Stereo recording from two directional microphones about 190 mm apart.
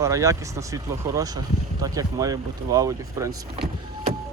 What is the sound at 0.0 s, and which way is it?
Speech, 15° right (ahead or behind).